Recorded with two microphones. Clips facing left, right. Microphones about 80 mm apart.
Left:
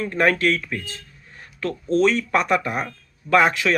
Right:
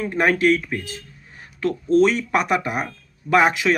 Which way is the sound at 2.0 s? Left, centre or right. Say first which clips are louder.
Right 1 dB; centre.